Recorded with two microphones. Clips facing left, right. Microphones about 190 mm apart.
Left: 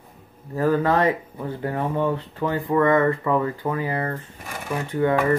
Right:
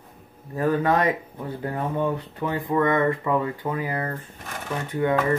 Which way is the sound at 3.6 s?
5° left (ahead or behind).